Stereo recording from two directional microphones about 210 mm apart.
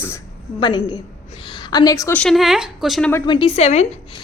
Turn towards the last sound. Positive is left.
turn(degrees=30)  # may be behind; listen again after turning